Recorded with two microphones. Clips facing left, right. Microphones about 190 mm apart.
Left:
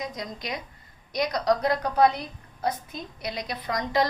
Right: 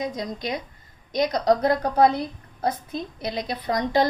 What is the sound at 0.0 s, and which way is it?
A woman's voice, 25° right (ahead or behind).